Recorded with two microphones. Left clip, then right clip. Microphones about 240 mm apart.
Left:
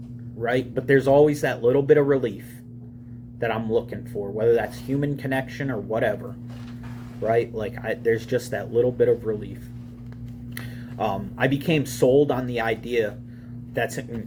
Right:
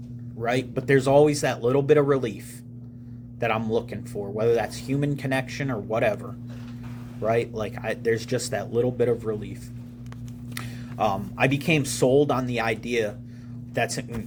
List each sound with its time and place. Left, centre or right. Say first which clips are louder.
0.3 s speech: left 2 dB; right
3.4 s speech: left 1 dB; right
7.2 s speech: left 2 dB; right
10.6 s speech: right 2 dB; right